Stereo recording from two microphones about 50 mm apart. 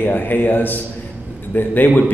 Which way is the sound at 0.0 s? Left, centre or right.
Left.